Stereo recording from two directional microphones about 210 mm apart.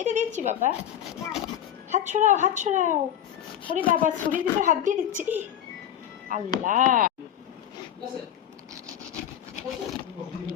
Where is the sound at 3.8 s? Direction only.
40° right (ahead or behind).